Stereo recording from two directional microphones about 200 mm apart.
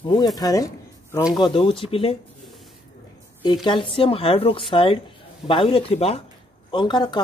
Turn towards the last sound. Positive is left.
turn(degrees=25)  # may be behind; listen again after turning